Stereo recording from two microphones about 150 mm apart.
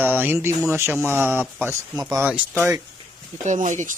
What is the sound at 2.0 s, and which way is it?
Speech, 25° right (ahead or behind).